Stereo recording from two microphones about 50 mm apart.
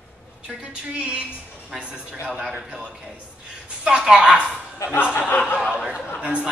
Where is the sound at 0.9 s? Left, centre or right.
Right.